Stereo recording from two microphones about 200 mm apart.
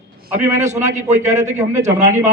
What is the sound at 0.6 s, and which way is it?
A man's voice, 35° right (ahead or behind).